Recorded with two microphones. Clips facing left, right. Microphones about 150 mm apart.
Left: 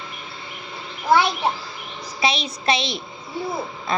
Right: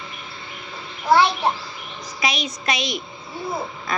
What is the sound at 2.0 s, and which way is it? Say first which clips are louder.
A child's voice: left 2 dB; 30° left (ahead or behind).